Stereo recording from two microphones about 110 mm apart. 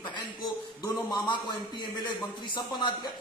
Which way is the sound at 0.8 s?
40° left (ahead or behind).